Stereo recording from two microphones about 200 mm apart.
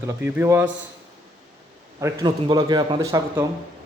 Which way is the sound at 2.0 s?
20° right (ahead or behind).